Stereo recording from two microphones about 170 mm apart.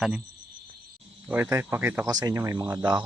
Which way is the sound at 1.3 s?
10° right (ahead or behind).